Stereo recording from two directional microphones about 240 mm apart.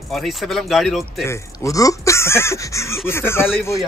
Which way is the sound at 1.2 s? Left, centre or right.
Centre.